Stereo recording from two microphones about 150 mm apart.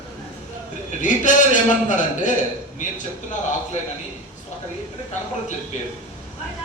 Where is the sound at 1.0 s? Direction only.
55° left (ahead or behind).